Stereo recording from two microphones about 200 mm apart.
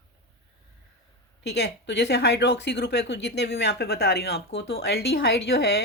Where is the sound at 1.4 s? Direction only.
55° left (ahead or behind).